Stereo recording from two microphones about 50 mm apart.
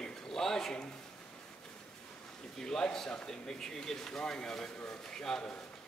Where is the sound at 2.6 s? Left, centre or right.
Centre.